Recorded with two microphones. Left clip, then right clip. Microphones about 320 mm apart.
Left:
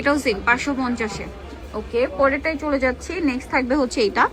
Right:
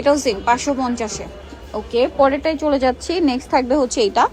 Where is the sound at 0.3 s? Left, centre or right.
Centre.